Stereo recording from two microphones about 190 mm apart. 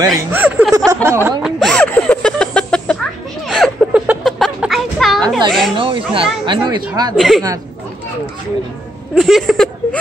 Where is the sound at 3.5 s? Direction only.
Centre (ahead or behind).